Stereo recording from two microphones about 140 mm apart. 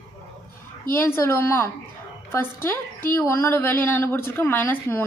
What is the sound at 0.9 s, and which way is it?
A woman's voice, 15° left (ahead or behind).